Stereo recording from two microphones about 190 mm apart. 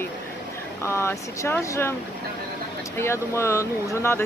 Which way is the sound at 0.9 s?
15° left (ahead or behind).